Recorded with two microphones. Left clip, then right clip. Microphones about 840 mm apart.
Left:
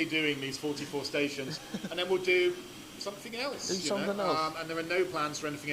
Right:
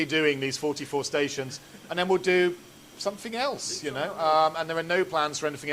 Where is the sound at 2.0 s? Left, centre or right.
Right.